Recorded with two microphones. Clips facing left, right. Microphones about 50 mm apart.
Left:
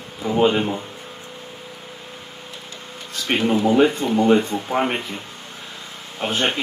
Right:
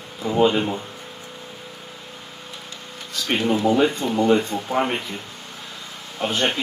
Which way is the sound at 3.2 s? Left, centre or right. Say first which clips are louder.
Left 1 dB; left.